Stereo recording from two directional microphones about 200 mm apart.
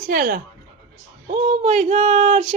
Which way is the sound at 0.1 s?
45° right (ahead or behind).